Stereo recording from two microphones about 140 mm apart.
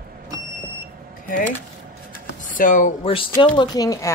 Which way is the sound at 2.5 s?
70° left (ahead or behind).